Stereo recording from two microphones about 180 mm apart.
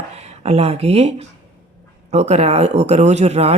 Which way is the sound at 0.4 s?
35° right (ahead or behind).